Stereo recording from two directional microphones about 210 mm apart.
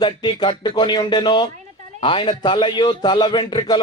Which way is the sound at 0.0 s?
20° left (ahead or behind).